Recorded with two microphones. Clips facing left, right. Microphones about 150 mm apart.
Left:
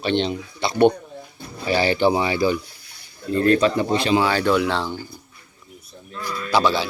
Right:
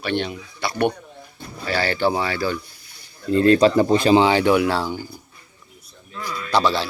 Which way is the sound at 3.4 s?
30° right (ahead or behind).